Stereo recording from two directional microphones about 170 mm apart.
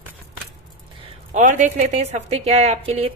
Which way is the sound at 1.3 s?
45° right (ahead or behind).